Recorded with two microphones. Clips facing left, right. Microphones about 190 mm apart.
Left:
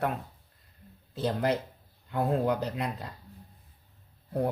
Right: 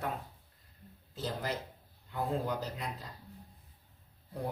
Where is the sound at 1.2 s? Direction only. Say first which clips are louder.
Left 9 dB; 65° left (ahead or behind).